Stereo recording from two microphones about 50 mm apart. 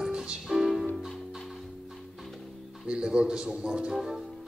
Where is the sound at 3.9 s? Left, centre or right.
Centre.